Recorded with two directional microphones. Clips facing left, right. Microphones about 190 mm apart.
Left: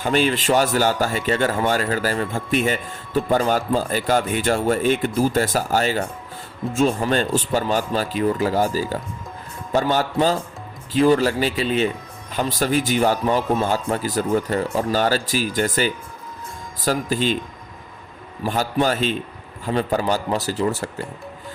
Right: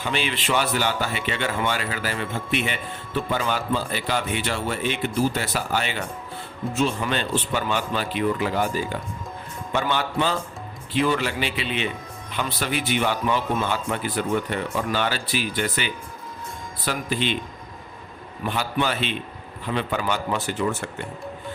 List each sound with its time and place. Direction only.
0.0 s a man's voice: 45° left (ahead or behind)
18.4 s a man's voice: 40° left (ahead or behind)